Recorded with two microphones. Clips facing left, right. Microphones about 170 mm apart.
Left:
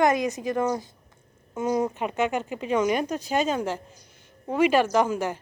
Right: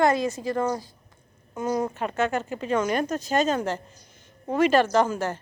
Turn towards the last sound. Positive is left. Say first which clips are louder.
# even
turn(degrees=15)  # may be behind; listen again after turning